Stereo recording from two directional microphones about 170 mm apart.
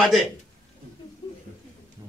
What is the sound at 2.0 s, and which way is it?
Thunder, 25° right (ahead or behind).